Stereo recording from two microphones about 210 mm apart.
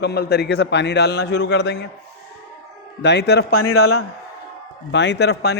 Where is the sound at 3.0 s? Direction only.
55° left (ahead or behind).